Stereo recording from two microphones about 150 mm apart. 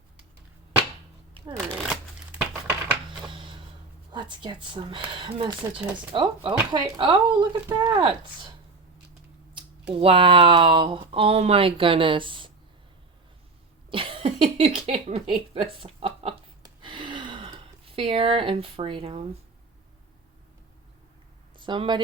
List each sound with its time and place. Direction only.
1.8 s shuffling cards: 5° right (ahead or behind)
3.2 s a sound: 35° right (ahead or behind)
4.1 s speech: 30° right (ahead or behind)
9.9 s speech: 40° right (ahead or behind)
13.9 s cough: 35° right (ahead or behind)
15.5 s speech: 40° right (ahead or behind)
16.6 s gasp: 35° right (ahead or behind)
21.6 s speech: 30° right (ahead or behind)